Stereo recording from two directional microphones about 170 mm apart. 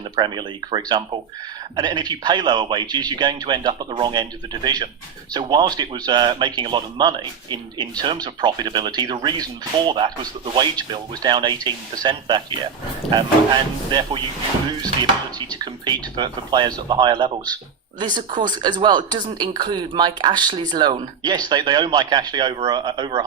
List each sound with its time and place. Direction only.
0.2 s speech: 25° right (ahead or behind)
13.9 s speech: 25° right (ahead or behind)
15.4 s speech: 25° right (ahead or behind)